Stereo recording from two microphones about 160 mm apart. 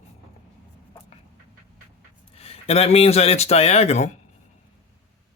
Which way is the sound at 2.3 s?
40° left (ahead or behind).